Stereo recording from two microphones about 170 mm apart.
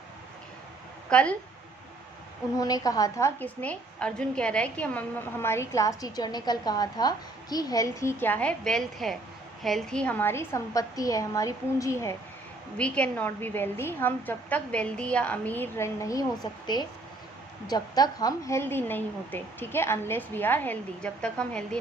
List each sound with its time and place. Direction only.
1.1 s a woman's voice: 5° left (ahead or behind)
2.6 s a woman's voice: 20° left (ahead or behind); by 21.8 s 5° left (ahead or behind)